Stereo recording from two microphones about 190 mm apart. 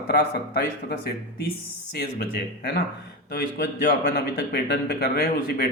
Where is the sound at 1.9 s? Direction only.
55° left (ahead or behind).